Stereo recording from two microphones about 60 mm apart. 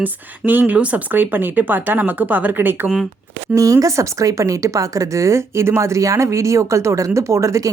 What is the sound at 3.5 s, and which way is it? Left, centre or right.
Speech, right.